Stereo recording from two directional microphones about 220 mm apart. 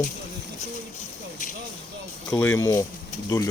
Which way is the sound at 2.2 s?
5° left (ahead or behind).